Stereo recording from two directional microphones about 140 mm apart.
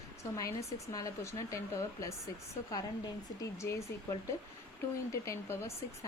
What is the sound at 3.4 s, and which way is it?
Speech, 20° left (ahead or behind).